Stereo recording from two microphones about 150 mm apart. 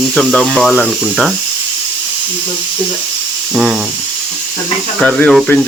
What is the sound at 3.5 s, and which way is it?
Speech, 5° right (ahead or behind).